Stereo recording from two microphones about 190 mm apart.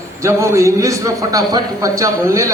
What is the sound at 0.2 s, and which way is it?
A man's voice, 15° right (ahead or behind).